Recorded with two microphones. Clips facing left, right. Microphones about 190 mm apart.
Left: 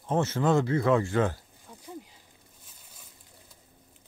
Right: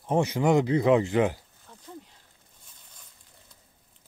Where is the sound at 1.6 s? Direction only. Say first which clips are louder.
Left 2 dB; 10° left (ahead or behind).